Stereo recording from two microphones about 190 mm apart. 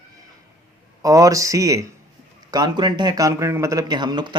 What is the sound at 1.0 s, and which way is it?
Speech, 15° right (ahead or behind).